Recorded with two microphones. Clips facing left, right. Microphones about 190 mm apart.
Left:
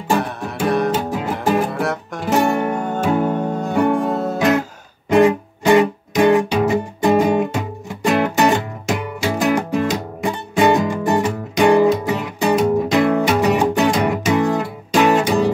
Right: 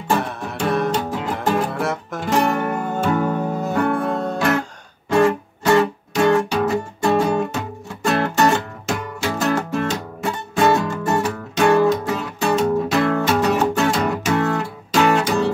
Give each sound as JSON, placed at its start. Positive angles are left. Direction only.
{"t": 0.1, "sound": "music", "side_deg": 0}
{"t": 2.7, "sound": "music", "side_deg": -5}
{"t": 3.0, "sound": "music", "side_deg": 10}
{"t": 3.3, "sound": "music", "side_deg": -5}
{"t": 3.7, "sound": "music", "side_deg": 15}
{"t": 4.0, "sound": "music", "side_deg": 0}
{"t": 4.4, "sound": "guitar", "side_deg": 15}
{"t": 5.1, "sound": "music", "side_deg": 15}